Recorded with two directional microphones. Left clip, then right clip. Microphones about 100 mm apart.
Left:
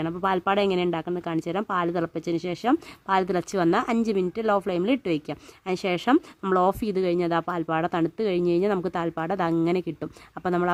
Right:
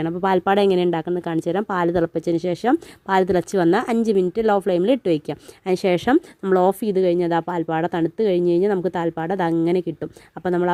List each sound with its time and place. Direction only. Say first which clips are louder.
0.0 s a woman's voice: right 5 dB; 40° right (ahead or behind); by 10.7 s 20° right (ahead or behind)